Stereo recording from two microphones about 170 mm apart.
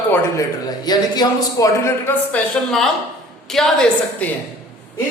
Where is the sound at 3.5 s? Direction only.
5° left (ahead or behind).